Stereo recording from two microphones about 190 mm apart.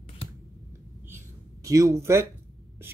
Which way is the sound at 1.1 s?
15° right (ahead or behind).